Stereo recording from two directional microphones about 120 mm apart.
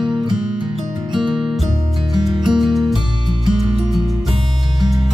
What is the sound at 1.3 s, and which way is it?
Music, 5° right (ahead or behind).